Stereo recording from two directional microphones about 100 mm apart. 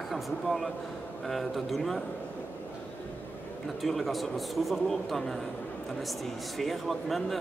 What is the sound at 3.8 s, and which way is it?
A man's voice, centre (ahead or behind).